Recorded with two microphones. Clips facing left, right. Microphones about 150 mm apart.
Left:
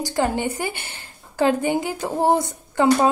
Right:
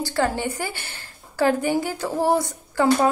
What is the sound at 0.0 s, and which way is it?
A woman's voice, 15° left (ahead or behind).